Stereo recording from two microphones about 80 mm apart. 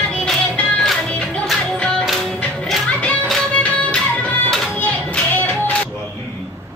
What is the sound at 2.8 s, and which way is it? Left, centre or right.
Music, centre.